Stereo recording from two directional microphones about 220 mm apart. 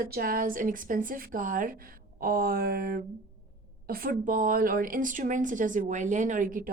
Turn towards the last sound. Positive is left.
turn(degrees=-35)  # may be behind; listen again after turning